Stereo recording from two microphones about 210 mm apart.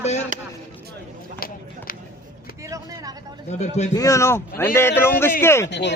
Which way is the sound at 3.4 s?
35° left (ahead or behind).